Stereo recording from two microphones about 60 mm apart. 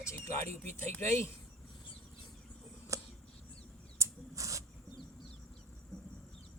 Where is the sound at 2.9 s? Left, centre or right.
Right.